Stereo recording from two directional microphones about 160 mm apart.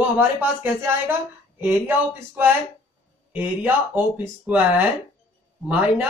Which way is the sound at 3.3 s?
10° right (ahead or behind).